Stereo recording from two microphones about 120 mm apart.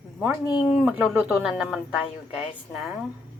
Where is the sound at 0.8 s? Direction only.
5° right (ahead or behind).